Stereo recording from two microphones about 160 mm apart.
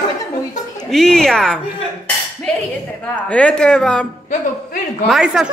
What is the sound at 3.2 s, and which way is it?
Speech, 5° left (ahead or behind).